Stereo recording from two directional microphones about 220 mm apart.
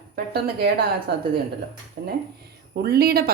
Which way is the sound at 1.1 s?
50° right (ahead or behind).